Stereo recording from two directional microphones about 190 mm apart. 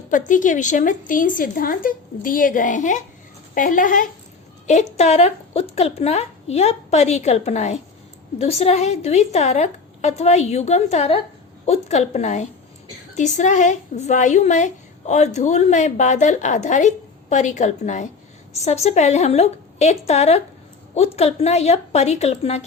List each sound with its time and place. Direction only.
0.1 s a woman's voice: 45° left (ahead or behind)